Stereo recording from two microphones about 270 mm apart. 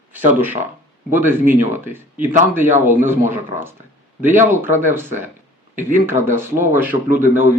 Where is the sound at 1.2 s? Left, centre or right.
Centre.